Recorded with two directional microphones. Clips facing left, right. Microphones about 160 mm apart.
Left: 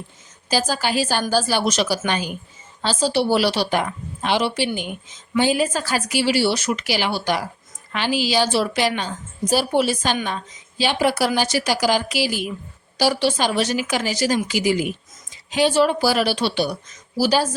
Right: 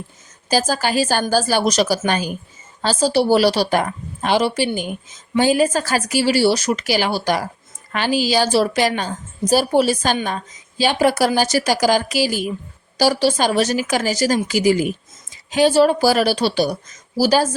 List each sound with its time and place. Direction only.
0.4 s a woman's voice: 45° right (ahead or behind)